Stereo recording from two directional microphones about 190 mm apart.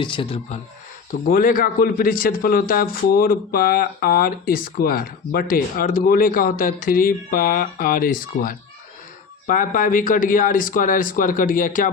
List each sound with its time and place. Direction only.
0.0 s speech: 25° left (ahead or behind)
1.3 s a man's voice: 45° left (ahead or behind)